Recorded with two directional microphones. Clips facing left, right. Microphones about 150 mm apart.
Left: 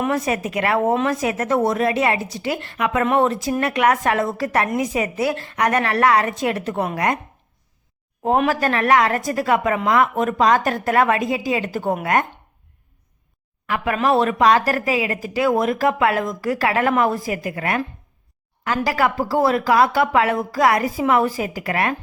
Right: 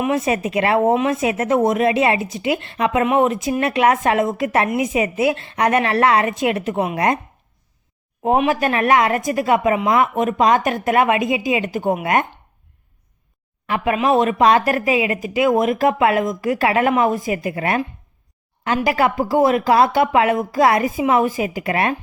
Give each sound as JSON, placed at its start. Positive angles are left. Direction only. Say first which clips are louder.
{"t": 0.2, "sound": "a woman's voice", "louder": "right 3 dB", "side_deg": -25}
{"t": 3.0, "sound": "a woman's voice", "louder": "right 1 dB", "side_deg": -15}
{"t": 8.4, "sound": "a woman's voice", "louder": "right 1 dB", "side_deg": -20}
{"t": 13.7, "sound": "a woman's voice", "louder": "right 2 dB", "side_deg": -25}
{"t": 18.9, "sound": "a woman's voice", "louder": "right 2 dB", "side_deg": -20}